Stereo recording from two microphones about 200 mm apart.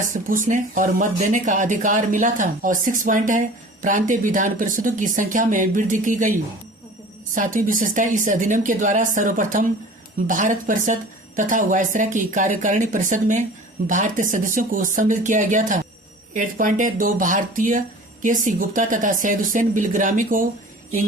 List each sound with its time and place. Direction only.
0.0 s speech: 40° right (ahead or behind)
7.3 s speech: 40° right (ahead or behind)